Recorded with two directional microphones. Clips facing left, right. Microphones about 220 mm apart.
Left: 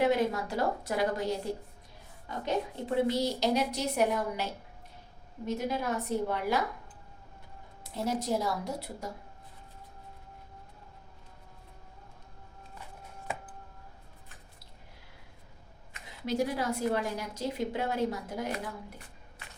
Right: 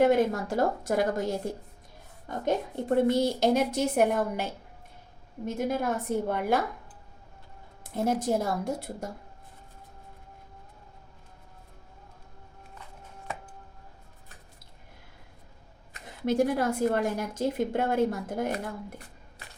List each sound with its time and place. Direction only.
0.0 s a woman's voice: 50° right (ahead or behind)
5.5 s a woman's voice: 50° right (ahead or behind)
7.9 s a woman's voice: 50° right (ahead or behind)
15.9 s a woman's voice: 50° right (ahead or behind)